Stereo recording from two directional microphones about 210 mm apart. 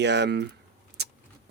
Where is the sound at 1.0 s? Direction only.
50° right (ahead or behind).